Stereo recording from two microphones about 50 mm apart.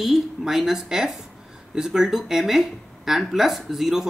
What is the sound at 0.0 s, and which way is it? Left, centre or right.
Speech, centre.